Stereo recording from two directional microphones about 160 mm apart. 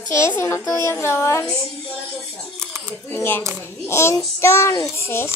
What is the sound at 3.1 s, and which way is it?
A child's voice, 15° left (ahead or behind).